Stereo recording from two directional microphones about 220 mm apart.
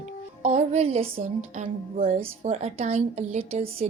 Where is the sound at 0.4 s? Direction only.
30° right (ahead or behind).